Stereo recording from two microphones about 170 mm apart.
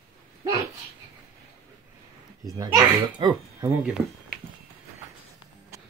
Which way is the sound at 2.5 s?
20° right (ahead or behind).